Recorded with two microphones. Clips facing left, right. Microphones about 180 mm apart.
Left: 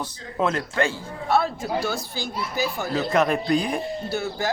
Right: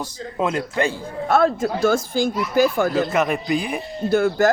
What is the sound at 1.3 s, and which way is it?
Speech, 50° right (ahead or behind).